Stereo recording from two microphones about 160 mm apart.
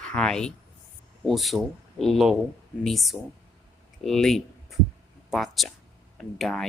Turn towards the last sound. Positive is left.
turn(degrees=5)  # may be behind; listen again after turning